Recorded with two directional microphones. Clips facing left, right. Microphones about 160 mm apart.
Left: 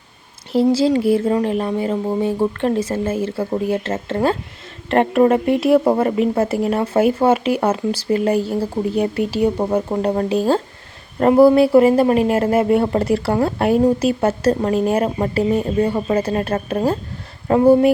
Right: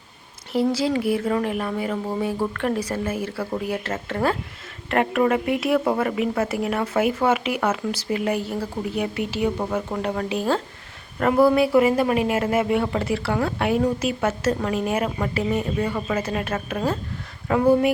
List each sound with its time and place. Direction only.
0.5 s speech: 25° left (ahead or behind)